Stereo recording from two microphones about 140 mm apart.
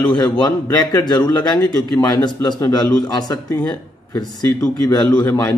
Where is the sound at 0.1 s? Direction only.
30° left (ahead or behind).